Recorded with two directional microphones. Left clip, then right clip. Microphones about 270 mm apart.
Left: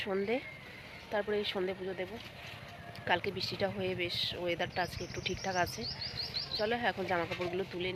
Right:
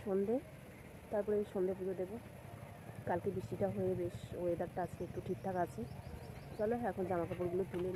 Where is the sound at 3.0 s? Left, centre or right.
Centre.